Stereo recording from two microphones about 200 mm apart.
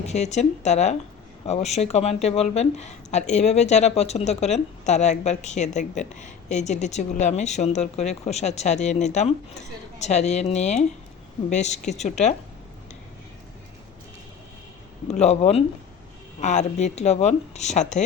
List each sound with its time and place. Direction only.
0.0 s speech: 35° left (ahead or behind)
15.0 s speech: 35° left (ahead or behind)